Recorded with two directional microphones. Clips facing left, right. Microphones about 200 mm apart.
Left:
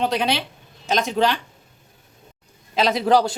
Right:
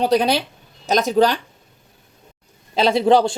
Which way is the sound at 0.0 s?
40° right (ahead or behind).